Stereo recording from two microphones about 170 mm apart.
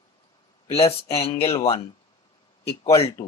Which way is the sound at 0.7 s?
35° left (ahead or behind).